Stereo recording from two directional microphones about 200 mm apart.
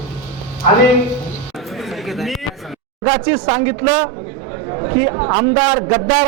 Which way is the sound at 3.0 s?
20° right (ahead or behind).